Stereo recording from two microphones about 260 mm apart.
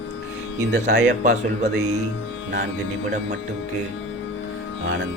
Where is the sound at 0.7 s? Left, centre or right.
Right.